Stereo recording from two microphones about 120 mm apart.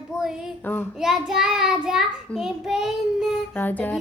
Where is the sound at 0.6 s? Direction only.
15° left (ahead or behind).